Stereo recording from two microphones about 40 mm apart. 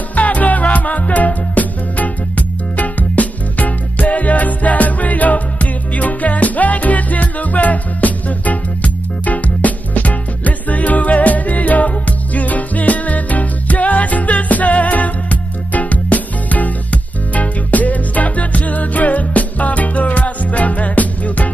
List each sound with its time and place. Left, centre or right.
0.1 s music: left